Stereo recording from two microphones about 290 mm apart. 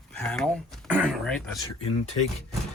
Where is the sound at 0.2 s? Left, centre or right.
Centre.